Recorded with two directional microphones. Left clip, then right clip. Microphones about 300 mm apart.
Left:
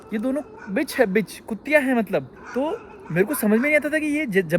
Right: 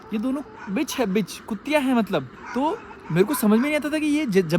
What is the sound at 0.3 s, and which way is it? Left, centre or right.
Speech, centre.